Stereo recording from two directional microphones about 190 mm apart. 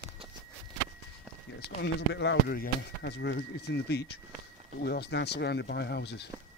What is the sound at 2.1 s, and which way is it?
Speech, 60° left (ahead or behind).